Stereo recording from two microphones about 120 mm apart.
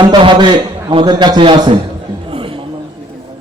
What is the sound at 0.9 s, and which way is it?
Music, 40° right (ahead or behind).